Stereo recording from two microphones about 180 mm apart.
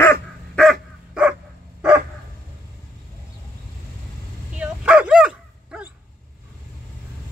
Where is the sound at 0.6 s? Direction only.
5° right (ahead or behind).